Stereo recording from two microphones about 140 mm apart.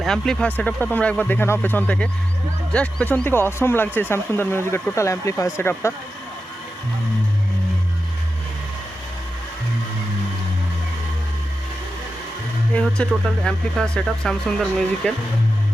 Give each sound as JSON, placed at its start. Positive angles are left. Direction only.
{"t": 0.0, "sound": "speech", "side_deg": 5}
{"t": 12.7, "sound": "speech", "side_deg": 5}